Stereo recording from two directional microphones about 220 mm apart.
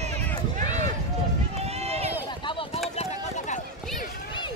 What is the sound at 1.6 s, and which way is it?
Run, 30° right (ahead or behind).